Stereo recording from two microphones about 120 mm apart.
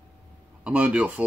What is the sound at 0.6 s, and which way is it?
Speech, 10° right (ahead or behind).